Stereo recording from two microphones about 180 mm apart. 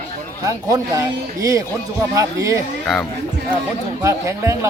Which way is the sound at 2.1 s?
20° right (ahead or behind).